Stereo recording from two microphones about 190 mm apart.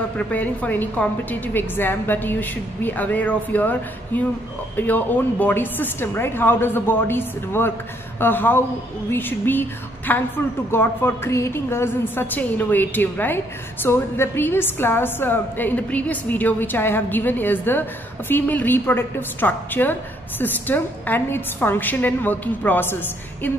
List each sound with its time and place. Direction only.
0.3 s a woman's voice: 10° left (ahead or behind)